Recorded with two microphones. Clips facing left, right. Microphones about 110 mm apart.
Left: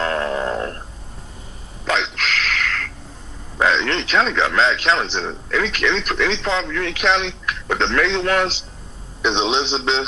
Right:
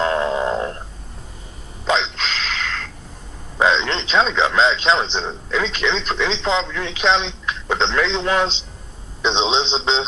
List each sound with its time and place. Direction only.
0.0 s frog: 20° right (ahead or behind)
1.8 s a sound: 20° right (ahead or behind)
3.6 s a man's voice: 20° right (ahead or behind)